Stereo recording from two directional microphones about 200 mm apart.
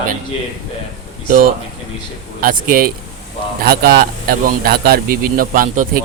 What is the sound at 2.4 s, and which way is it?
Speech, 45° right (ahead or behind).